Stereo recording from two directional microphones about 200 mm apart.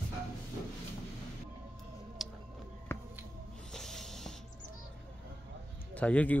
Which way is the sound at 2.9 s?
15° left (ahead or behind).